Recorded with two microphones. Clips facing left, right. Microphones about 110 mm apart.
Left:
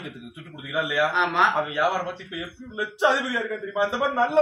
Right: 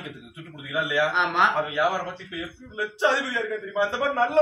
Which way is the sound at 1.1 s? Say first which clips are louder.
Left 1 dB; centre (ahead or behind).